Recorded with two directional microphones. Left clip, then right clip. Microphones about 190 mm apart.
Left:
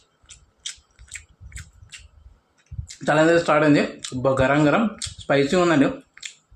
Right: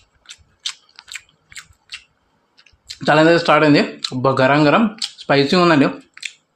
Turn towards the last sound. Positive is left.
turn(degrees=-50)  # may be behind; listen again after turning